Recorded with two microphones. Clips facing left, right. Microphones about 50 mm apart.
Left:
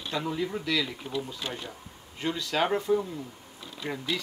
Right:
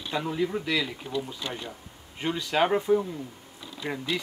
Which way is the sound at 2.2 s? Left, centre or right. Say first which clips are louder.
Right 3 dB; centre.